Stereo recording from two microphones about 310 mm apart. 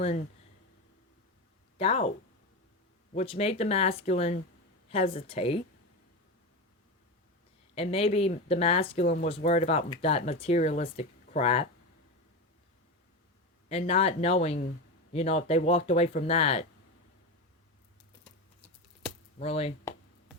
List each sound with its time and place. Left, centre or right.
1.8 s speech: centre
3.2 s speech: centre
7.8 s speech: centre
13.7 s speech: centre
19.4 s speech: centre